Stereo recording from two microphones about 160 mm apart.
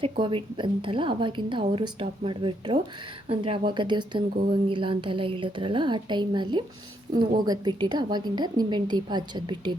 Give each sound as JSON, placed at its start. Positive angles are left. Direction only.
{"t": 0.0, "sound": "a woman's voice", "side_deg": -35}